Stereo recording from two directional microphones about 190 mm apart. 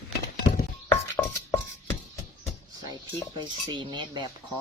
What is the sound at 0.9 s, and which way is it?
Music, 10° left (ahead or behind).